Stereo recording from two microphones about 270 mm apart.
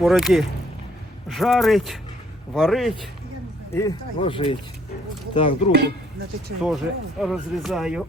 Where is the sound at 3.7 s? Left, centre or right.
Centre.